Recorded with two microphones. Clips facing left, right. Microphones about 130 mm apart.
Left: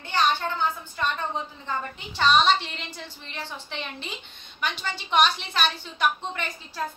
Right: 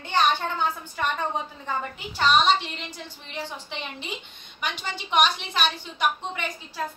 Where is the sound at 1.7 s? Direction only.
10° right (ahead or behind).